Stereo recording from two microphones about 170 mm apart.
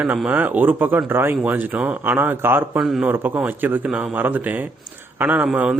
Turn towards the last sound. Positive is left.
turn(degrees=-5)  # may be behind; listen again after turning